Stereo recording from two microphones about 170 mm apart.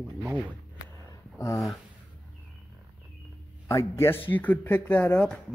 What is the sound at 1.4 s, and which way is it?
Speech, 15° left (ahead or behind).